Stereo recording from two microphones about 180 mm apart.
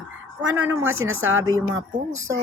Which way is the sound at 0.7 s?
90° right.